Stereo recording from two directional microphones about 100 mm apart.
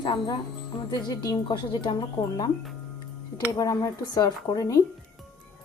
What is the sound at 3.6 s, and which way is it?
Speech, 35° left (ahead or behind).